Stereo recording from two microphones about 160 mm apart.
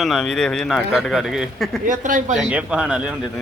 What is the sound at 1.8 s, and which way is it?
Speech, 55° right (ahead or behind).